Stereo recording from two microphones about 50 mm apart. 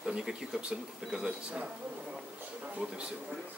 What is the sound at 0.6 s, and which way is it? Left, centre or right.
Speech, centre.